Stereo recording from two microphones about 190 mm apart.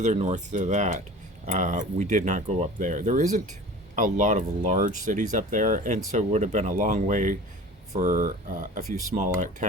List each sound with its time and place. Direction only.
0.0 s speech: 35° right (ahead or behind)